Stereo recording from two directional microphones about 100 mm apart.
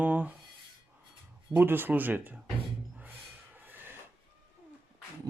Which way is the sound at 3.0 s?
20° right (ahead or behind).